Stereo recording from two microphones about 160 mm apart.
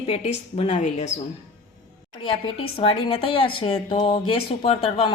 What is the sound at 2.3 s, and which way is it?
A woman's voice, 35° left (ahead or behind).